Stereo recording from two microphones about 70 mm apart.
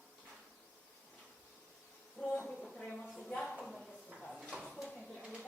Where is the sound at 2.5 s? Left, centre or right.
Centre.